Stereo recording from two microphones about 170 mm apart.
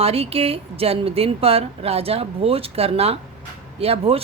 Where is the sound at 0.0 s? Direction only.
35° right (ahead or behind).